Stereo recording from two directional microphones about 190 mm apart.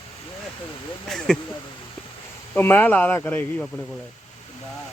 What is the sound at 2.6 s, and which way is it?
Speech, 10° left (ahead or behind).